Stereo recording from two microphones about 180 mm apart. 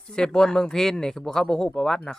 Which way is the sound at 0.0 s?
5° left (ahead or behind).